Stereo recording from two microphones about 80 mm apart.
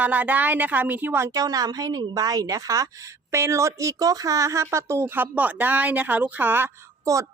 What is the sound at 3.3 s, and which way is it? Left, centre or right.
Speech, right.